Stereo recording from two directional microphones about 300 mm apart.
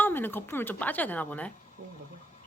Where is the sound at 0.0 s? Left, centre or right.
Centre.